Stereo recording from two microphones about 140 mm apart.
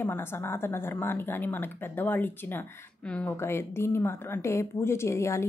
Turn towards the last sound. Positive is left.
turn(degrees=20)  # may be behind; listen again after turning